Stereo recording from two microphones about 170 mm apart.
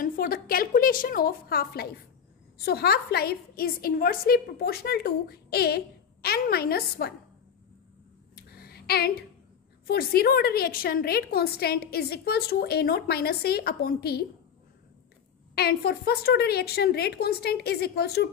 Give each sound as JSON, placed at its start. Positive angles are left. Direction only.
{"t": 0.0, "sound": "a woman's voice", "side_deg": 60}
{"t": 8.4, "sound": "a sound", "side_deg": 65}
{"t": 9.8, "sound": "a woman's voice", "side_deg": 65}
{"t": 15.5, "sound": "a woman's voice", "side_deg": 65}